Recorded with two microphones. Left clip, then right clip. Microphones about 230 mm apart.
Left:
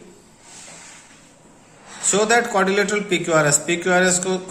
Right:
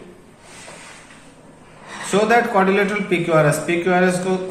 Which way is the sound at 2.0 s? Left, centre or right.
Left.